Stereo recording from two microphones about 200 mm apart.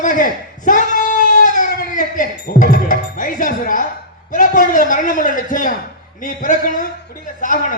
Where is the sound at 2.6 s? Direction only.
40° left (ahead or behind).